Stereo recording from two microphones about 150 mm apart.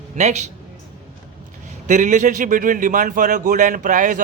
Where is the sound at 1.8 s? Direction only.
55° right (ahead or behind).